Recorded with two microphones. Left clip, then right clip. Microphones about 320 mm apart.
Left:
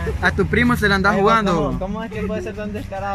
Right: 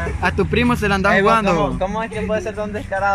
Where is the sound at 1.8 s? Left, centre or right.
Right.